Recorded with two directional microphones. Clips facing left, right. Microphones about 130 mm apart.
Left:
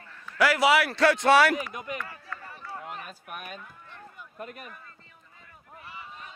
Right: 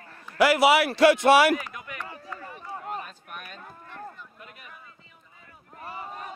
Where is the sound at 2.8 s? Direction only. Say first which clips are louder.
Right 5 dB; 40° right (ahead or behind).